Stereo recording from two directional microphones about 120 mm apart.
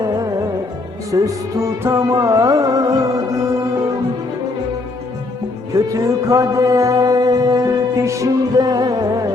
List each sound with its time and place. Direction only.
0.0 s music: 30° right (ahead or behind)
5.7 s music: 25° right (ahead or behind)